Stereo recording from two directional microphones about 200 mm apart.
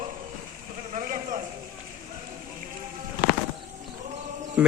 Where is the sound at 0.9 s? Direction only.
40° right (ahead or behind).